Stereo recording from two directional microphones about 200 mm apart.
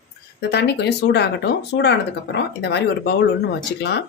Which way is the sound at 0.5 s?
60° left (ahead or behind).